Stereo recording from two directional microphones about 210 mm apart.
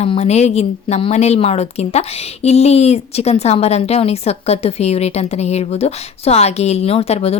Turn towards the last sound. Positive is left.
turn(degrees=30)  # may be behind; listen again after turning